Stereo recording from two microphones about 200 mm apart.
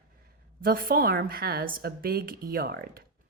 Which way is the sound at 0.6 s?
50° right (ahead or behind).